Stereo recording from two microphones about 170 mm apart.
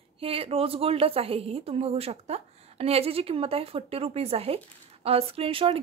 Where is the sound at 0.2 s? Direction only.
35° right (ahead or behind).